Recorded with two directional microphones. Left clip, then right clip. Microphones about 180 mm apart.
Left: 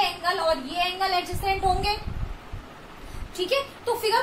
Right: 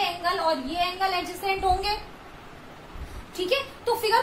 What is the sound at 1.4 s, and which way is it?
Speech, 10° right (ahead or behind).